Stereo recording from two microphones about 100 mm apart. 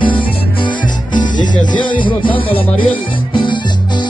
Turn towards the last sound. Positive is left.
turn(degrees=50)  # may be behind; listen again after turning